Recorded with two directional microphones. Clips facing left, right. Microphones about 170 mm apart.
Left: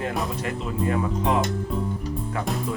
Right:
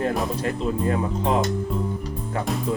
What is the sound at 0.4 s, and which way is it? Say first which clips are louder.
Music: right 3 dB; 35° right (ahead or behind).